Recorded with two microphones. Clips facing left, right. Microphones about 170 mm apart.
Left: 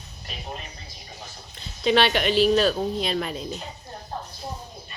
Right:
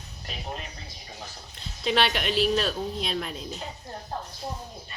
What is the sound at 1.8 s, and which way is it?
Speech, centre (ahead or behind).